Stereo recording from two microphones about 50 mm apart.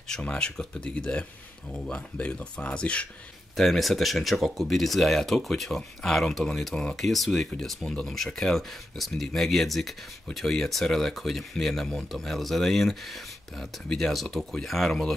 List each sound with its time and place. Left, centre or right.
0.2 s speech: left
3.5 s speech: centre
7.2 s speech: centre
8.4 s speech: centre